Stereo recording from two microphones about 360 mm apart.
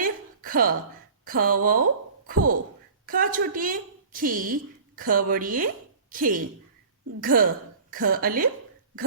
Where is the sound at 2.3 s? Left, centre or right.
Right.